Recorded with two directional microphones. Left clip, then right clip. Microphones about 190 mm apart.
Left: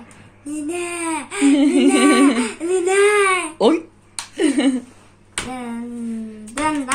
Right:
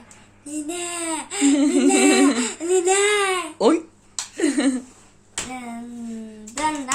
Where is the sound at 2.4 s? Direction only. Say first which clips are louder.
Left 1 dB; 25° right (ahead or behind).